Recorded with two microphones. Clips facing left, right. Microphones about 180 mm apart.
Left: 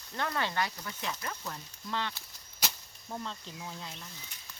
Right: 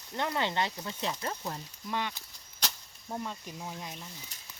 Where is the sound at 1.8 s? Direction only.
15° right (ahead or behind).